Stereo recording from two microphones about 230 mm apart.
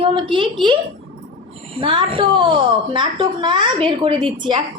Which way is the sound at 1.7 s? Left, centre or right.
Right.